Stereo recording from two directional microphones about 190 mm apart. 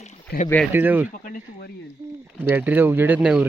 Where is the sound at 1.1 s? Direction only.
45° left (ahead or behind).